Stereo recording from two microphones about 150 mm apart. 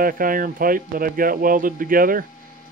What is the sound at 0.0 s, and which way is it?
Speech, 70° right (ahead or behind).